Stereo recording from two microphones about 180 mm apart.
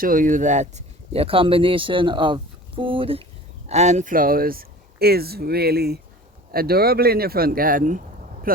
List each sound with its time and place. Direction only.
0.0 s speech: 50° right (ahead or behind)